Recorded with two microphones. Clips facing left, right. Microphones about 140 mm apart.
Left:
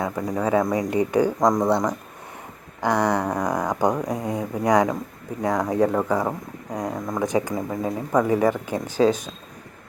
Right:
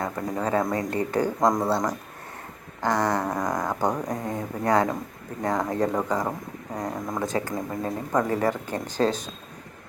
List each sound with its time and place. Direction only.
0.0 s speech: centre (ahead or behind)
0.7 s speech: 15° left (ahead or behind)
1.4 s speech: centre (ahead or behind)
2.8 s speech: 15° left (ahead or behind)
7.5 s speech: 5° left (ahead or behind)